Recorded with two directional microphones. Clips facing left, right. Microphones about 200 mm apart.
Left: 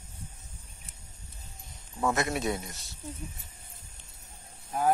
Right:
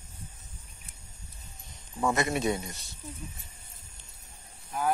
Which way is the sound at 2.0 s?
Centre (ahead or behind).